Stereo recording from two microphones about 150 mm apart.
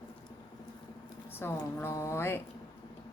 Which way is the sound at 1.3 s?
15° left (ahead or behind).